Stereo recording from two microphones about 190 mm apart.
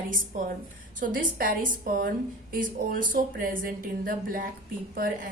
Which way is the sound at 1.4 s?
50° right (ahead or behind).